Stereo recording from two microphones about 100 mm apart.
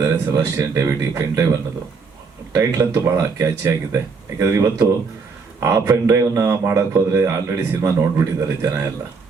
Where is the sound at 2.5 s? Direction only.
35° right (ahead or behind).